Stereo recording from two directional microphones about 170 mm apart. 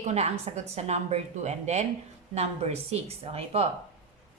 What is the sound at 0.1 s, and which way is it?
A woman's voice, 40° right (ahead or behind).